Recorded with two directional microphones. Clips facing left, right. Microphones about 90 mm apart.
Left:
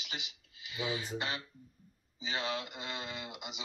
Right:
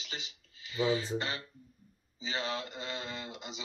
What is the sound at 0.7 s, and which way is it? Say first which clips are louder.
Speech: right 7 dB; 35° right (ahead or behind).